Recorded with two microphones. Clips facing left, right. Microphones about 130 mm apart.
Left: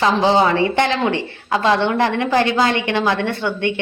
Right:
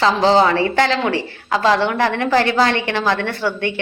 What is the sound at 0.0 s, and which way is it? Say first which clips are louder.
A woman's voice: right 1 dB; 15° left (ahead or behind).